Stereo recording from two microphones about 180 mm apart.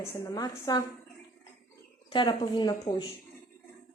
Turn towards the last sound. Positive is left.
turn(degrees=25)  # may be behind; listen again after turning